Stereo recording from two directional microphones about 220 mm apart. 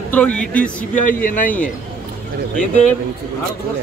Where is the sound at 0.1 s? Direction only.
5° left (ahead or behind).